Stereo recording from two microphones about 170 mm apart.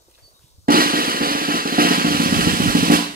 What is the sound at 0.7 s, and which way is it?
Drum, 60° right (ahead or behind).